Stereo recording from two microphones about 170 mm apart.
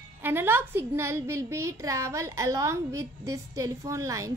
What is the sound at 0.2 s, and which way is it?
A woman's voice, 15° right (ahead or behind).